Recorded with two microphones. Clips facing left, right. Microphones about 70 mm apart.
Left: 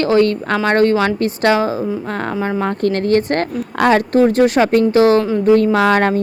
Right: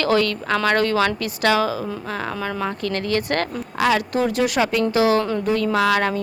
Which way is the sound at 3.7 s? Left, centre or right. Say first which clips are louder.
Left 7 dB; left.